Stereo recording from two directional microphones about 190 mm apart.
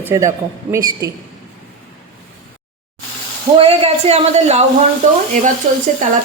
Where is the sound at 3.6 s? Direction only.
30° right (ahead or behind).